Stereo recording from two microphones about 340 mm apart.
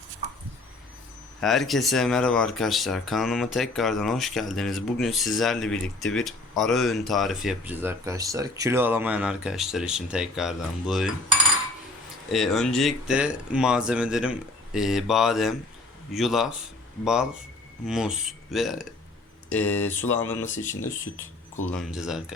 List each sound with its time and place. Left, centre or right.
1.4 s speech: centre
12.3 s speech: centre
20.6 s speech: left
21.7 s speech: centre